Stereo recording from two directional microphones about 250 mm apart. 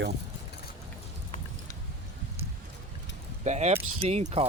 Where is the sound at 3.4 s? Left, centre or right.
Right.